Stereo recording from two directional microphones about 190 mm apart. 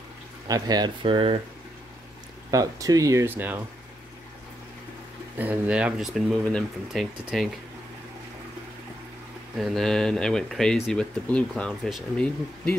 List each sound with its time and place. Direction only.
0.5 s speech: 20° right (ahead or behind)
2.5 s speech: 20° right (ahead or behind)
5.4 s speech: 5° right (ahead or behind)
9.6 s speech: centre (ahead or behind)